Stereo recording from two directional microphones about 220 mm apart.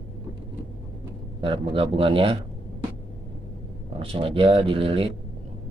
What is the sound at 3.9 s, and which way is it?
Speech, 25° right (ahead or behind).